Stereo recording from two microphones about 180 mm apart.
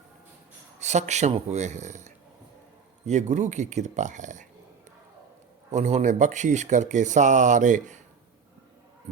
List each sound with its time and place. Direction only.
0.8 s a man's voice: 40° right (ahead or behind)
5.7 s speech: 40° right (ahead or behind)